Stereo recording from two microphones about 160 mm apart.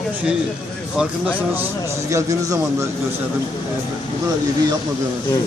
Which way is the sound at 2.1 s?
20° right (ahead or behind).